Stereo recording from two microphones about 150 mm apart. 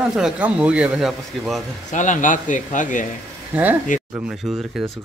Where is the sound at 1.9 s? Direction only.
55° left (ahead or behind).